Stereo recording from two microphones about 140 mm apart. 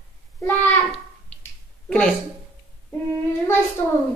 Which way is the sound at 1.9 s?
5° left (ahead or behind).